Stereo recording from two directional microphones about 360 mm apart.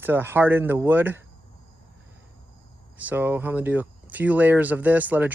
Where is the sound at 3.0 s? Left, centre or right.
Centre.